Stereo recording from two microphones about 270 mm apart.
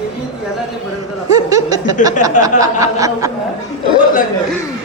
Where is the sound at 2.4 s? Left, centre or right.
Left.